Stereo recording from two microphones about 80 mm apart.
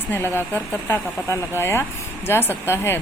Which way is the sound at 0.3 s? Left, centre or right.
Left.